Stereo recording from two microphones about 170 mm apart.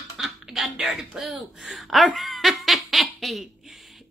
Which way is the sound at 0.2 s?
Centre (ahead or behind).